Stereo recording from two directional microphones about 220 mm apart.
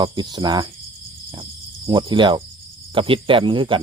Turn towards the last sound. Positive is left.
turn(degrees=-20)  # may be behind; listen again after turning